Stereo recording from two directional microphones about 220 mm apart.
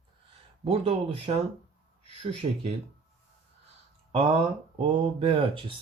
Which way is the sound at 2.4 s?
25° right (ahead or behind).